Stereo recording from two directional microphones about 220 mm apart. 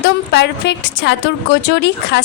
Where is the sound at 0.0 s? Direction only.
50° left (ahead or behind).